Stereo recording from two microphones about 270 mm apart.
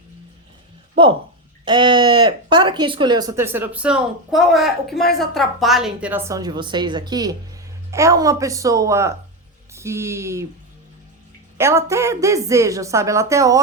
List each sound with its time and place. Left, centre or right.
1.0 s a woman's voice: centre
11.5 s a woman's voice: centre